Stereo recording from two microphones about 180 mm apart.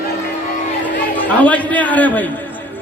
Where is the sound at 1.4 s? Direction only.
10° left (ahead or behind).